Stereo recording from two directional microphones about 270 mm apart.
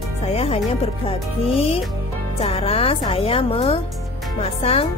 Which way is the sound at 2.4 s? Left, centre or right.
Left.